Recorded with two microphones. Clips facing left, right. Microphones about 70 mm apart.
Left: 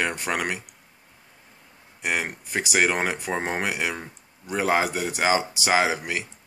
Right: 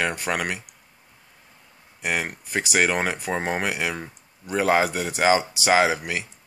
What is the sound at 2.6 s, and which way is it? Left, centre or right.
Speech, centre.